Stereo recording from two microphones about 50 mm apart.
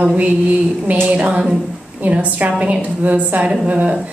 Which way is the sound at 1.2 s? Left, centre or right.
Centre.